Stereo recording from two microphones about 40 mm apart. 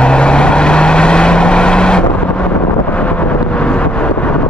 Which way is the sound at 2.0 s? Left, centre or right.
Left.